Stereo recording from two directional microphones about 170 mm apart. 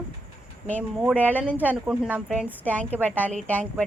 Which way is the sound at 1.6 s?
10° right (ahead or behind).